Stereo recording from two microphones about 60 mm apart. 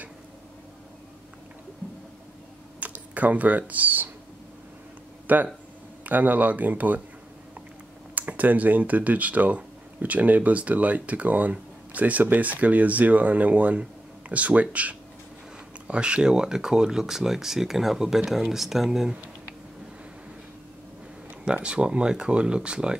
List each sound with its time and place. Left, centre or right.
2.8 s speech: right
5.2 s a sound: right
6.0 s speech: right
8.1 s speech: right; by 19.1 s centre
21.5 s speech: centre